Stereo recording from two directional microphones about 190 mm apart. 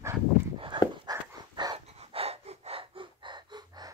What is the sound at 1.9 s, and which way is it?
Gasp, 30° right (ahead or behind).